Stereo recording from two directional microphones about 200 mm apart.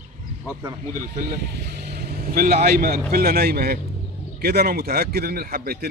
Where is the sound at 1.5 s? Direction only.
55° right (ahead or behind).